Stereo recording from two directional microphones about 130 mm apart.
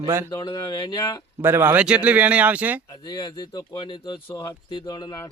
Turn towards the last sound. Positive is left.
turn(degrees=30)  # may be behind; listen again after turning